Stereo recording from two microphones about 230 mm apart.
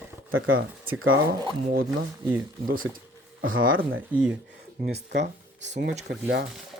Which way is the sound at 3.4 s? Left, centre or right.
Right.